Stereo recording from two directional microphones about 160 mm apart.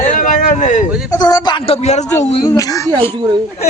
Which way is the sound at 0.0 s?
55° left (ahead or behind).